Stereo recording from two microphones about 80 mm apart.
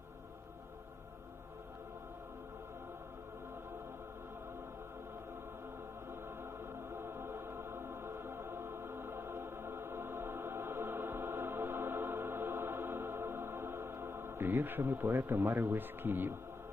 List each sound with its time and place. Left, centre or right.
6.9 s choir: right
15.4 s speech: right